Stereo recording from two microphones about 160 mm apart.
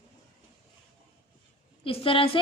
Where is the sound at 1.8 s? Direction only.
35° left (ahead or behind).